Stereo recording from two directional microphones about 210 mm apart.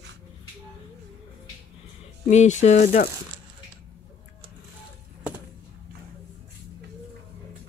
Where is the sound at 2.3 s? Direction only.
35° left (ahead or behind).